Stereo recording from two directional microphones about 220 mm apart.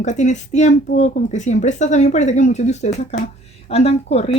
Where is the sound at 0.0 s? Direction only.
35° left (ahead or behind).